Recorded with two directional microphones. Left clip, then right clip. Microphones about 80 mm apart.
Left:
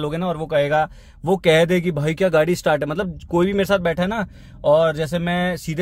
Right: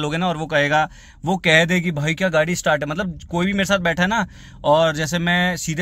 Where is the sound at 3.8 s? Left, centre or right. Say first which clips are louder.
Right 2 dB; left.